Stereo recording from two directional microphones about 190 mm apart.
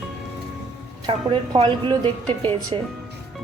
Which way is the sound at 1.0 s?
30° right (ahead or behind).